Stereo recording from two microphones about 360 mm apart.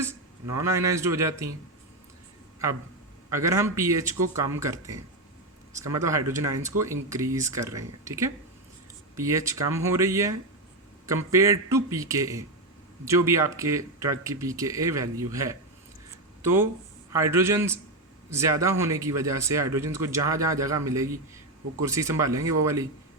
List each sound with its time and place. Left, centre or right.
0.0 s speech: centre
3.3 s speech: centre